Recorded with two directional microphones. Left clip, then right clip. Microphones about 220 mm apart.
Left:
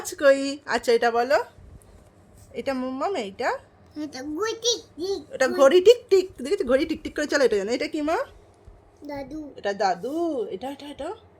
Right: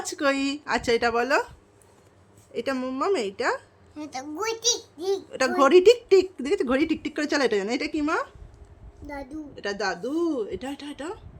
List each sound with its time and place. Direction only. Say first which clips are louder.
0.0 s a woman's voice: left 5 dB; 15° right (ahead or behind)
2.5 s a woman's voice: even; 25° right (ahead or behind)
5.3 s a woman's voice: left 1 dB; 20° right (ahead or behind)
9.0 s a woman's voice: left 2 dB; 5° right (ahead or behind)
9.6 s a woman's voice: left 4 dB; 20° right (ahead or behind)